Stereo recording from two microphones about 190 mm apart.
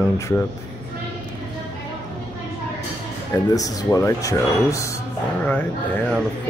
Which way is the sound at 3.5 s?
20° left (ahead or behind).